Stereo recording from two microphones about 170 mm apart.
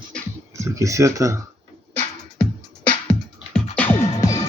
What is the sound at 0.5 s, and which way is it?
Speech, 20° right (ahead or behind).